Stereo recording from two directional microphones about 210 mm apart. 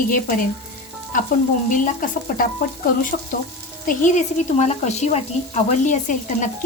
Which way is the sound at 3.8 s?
35° left (ahead or behind).